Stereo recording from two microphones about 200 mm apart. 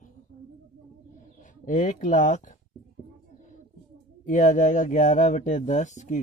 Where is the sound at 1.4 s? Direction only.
40° left (ahead or behind).